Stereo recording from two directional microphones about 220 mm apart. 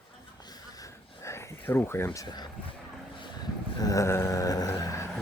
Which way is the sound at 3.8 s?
15° left (ahead or behind).